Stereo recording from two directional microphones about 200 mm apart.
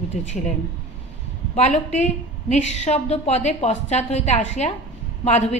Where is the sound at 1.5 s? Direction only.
35° left (ahead or behind).